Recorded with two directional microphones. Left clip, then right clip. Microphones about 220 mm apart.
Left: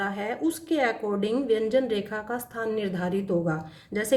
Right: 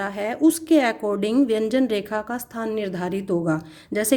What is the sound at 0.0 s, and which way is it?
A woman's voice, 45° right (ahead or behind).